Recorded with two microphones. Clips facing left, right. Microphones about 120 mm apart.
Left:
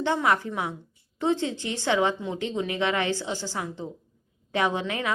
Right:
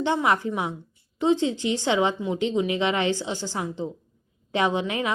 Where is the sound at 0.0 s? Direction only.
20° right (ahead or behind).